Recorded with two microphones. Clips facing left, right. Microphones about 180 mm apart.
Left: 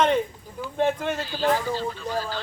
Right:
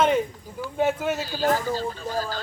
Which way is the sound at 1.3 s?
40° right (ahead or behind).